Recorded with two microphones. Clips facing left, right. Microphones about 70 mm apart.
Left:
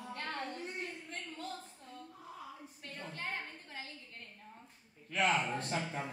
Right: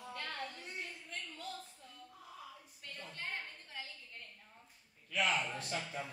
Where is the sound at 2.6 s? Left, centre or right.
Left.